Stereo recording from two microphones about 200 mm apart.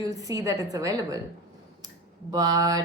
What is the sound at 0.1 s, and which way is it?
Speech, 15° right (ahead or behind).